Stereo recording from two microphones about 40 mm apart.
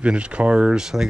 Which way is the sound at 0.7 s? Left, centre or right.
Centre.